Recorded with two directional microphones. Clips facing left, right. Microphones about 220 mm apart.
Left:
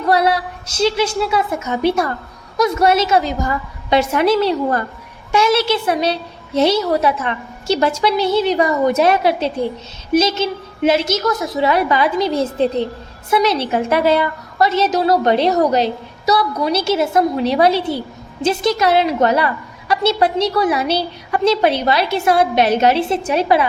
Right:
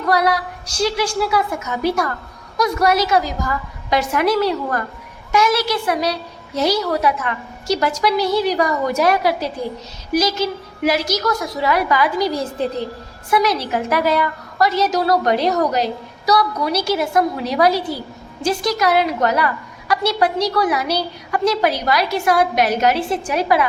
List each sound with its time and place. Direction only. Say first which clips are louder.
0.1 s a woman's voice: left 2 dB; 25° left (ahead or behind)